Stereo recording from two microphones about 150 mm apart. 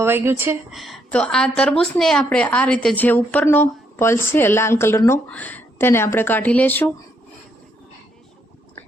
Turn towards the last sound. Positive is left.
turn(degrees=10)  # may be behind; listen again after turning